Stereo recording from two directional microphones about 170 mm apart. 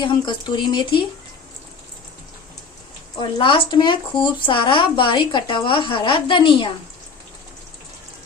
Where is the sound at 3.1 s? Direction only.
30° left (ahead or behind).